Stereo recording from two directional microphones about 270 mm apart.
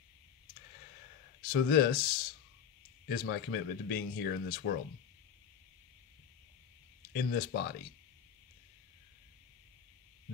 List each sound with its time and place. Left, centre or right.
1.4 s speech: left
7.1 s speech: left